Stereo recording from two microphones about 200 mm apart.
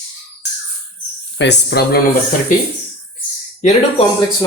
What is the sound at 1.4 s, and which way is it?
Speech, 55° left (ahead or behind).